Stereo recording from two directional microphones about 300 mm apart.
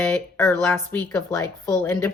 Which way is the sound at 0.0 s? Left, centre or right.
Centre.